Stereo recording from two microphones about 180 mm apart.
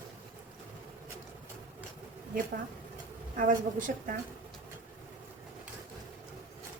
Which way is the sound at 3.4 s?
50° right (ahead or behind).